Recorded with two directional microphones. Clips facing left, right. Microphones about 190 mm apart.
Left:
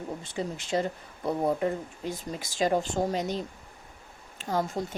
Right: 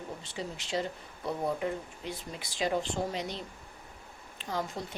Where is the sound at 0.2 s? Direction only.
50° left (ahead or behind).